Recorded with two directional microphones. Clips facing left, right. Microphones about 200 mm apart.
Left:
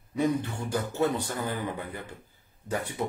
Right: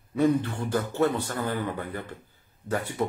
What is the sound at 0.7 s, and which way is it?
A man's voice, 15° left (ahead or behind).